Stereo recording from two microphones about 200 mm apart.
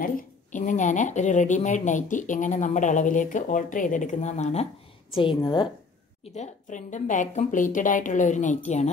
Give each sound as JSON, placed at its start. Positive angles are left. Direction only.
{"t": 0.0, "sound": "a woman's voice", "side_deg": 40}
{"t": 6.3, "sound": "a woman's voice", "side_deg": 35}